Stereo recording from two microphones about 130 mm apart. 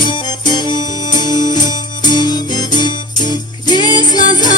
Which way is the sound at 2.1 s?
35° left (ahead or behind).